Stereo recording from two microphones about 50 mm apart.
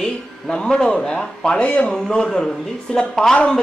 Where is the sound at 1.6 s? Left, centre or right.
Left.